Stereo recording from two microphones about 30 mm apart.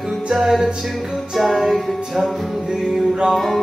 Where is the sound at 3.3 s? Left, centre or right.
Centre.